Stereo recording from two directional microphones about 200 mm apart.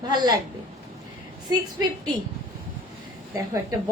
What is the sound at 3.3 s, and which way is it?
Speech, 15° right (ahead or behind).